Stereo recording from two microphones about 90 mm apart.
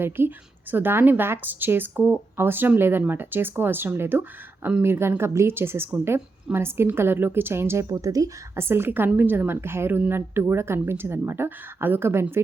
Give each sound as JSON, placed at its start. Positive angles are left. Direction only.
{"t": 0.0, "sound": "a woman's voice", "side_deg": -20}
{"t": 8.6, "sound": "a woman's voice", "side_deg": -25}